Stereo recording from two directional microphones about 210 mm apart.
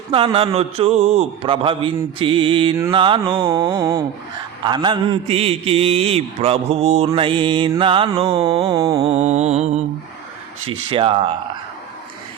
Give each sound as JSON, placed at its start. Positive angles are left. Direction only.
{"t": 0.1, "sound": "a man's voice", "side_deg": -25}
{"t": 3.8, "sound": "mantra", "side_deg": -15}
{"t": 4.6, "sound": "a man's voice", "side_deg": -20}
{"t": 8.7, "sound": "mantra", "side_deg": -15}
{"t": 9.0, "sound": "mantra", "side_deg": -30}
{"t": 10.7, "sound": "a man's voice", "side_deg": -25}